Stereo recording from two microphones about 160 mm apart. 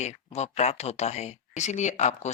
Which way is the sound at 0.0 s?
45° left (ahead or behind).